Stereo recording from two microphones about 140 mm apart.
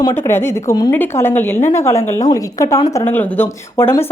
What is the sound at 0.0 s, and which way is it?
Speech, 20° left (ahead or behind).